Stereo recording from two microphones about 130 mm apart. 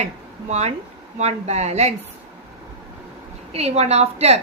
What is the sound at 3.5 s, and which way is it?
Speech, 55° right (ahead or behind).